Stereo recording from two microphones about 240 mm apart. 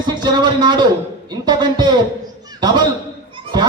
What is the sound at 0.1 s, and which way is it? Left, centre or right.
A man's voice, centre.